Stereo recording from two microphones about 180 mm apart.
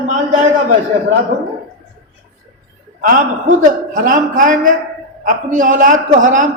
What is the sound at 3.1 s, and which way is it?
A man's voice, 45° right (ahead or behind).